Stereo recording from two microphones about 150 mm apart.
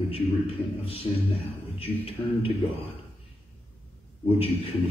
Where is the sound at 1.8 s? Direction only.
40° left (ahead or behind).